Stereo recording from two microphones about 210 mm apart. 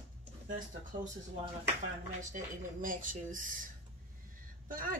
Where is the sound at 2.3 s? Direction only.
40° right (ahead or behind).